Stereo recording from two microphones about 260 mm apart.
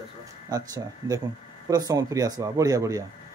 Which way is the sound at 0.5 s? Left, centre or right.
Centre.